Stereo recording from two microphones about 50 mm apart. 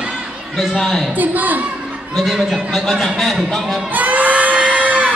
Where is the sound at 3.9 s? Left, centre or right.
Right.